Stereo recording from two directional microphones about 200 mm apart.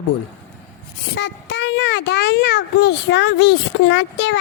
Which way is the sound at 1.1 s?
65° left (ahead or behind).